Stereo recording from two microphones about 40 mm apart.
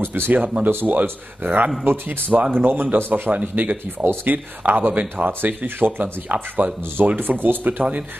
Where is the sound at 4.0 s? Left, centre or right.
Right.